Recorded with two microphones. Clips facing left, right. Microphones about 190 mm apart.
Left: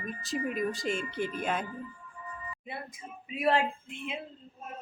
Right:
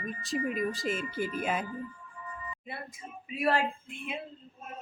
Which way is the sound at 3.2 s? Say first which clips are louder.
Left 1 dB; 20° left (ahead or behind).